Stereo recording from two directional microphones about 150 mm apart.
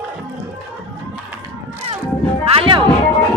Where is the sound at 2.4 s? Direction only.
40° right (ahead or behind).